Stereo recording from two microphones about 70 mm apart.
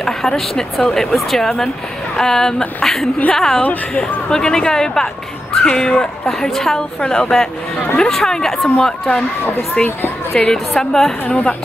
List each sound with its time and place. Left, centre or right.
0.0 s a woman's voice: centre
9.8 s a woman's voice: left
10.3 s a woman's voice: centre
11.2 s a woman's voice: centre